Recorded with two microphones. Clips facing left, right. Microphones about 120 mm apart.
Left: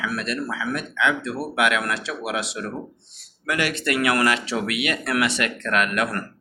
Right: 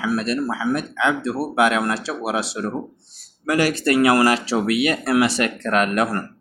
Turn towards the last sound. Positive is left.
turn(degrees=-35)  # may be behind; listen again after turning